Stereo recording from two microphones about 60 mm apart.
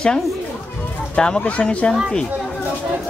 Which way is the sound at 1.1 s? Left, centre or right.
Centre.